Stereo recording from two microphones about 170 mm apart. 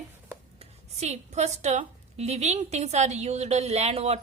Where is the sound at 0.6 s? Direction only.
40° right (ahead or behind).